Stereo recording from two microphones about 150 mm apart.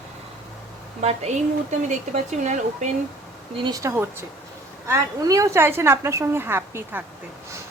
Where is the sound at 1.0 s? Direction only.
45° right (ahead or behind).